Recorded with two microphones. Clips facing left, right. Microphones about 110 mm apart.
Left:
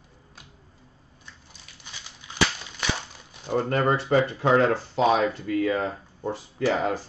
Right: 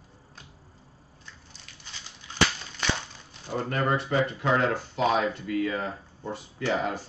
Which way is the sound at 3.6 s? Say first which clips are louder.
Left 2 dB; 30° left (ahead or behind).